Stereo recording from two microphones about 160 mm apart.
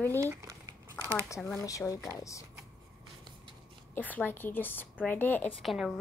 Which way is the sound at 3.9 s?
10° left (ahead or behind).